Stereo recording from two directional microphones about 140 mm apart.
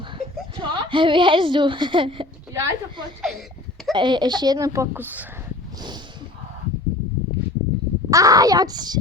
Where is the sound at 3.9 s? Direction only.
35° right (ahead or behind); by 5.5 s 15° right (ahead or behind).